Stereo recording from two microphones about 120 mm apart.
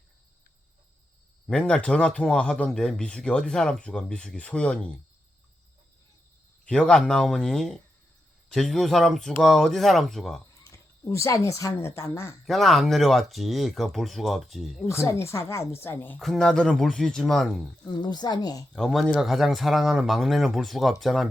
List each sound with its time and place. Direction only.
1.5 s speech: 10° left (ahead or behind)
6.7 s speech: 10° left (ahead or behind)
11.0 s speech: 25° left (ahead or behind)
12.5 s speech: centre (ahead or behind)
14.8 s speech: 25° left (ahead or behind)
16.2 s speech: 5° left (ahead or behind)
17.8 s a woman's voice: 40° left (ahead or behind)
18.7 s speech: centre (ahead or behind)